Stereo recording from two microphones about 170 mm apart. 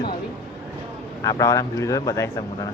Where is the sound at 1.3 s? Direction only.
20° left (ahead or behind).